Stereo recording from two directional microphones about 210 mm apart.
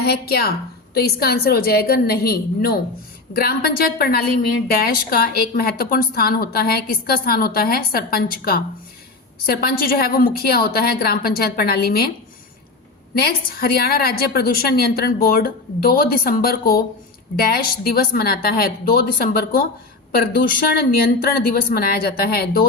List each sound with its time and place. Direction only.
0.0 s a woman's voice: 50° left (ahead or behind)
13.1 s a woman's voice: 45° left (ahead or behind)